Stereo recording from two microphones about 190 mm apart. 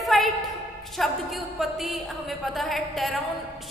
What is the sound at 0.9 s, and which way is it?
A woman's voice, centre (ahead or behind).